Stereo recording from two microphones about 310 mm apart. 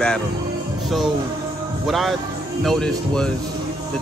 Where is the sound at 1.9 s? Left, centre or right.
Centre.